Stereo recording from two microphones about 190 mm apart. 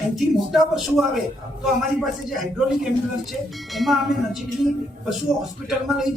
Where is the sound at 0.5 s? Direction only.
Centre (ahead or behind).